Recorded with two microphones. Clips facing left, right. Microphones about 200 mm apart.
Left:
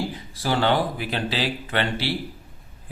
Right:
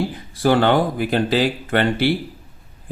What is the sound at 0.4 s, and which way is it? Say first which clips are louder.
Speech: right 6 dB; 55° right (ahead or behind).